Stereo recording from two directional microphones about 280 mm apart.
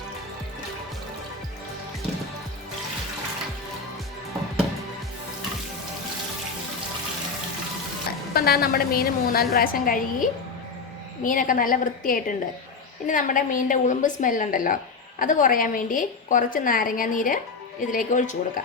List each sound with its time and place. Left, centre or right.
8.3 s a woman's voice: left